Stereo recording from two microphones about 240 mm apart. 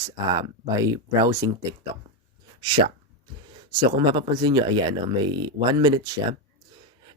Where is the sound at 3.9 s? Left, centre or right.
Centre.